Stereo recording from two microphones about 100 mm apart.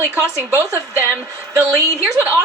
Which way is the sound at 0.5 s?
30° right (ahead or behind).